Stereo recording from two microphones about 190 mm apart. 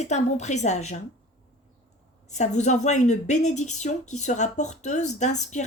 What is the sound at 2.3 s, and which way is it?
A woman's voice, 40° left (ahead or behind).